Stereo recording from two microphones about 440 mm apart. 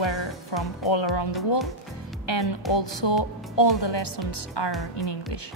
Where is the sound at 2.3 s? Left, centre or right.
Left.